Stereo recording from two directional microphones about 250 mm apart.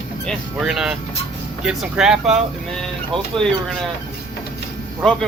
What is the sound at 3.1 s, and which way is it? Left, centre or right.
Speech, centre.